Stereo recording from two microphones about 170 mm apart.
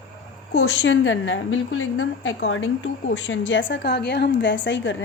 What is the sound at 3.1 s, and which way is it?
Speech, 90° left.